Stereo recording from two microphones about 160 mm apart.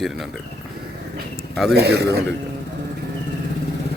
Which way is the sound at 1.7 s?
90° right.